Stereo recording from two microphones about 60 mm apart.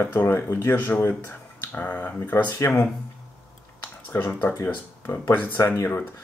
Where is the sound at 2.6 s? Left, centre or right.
Left.